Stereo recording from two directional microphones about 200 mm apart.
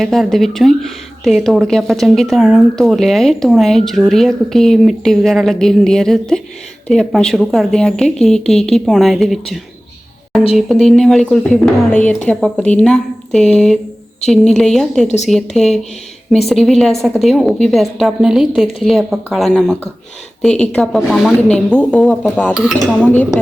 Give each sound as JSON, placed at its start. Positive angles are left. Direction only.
{"t": 0.0, "sound": "a woman's voice", "side_deg": 0}
{"t": 10.8, "sound": "a woman's voice", "side_deg": 0}
{"t": 15.0, "sound": "speech", "side_deg": 35}
{"t": 15.3, "sound": "a woman's voice", "side_deg": 0}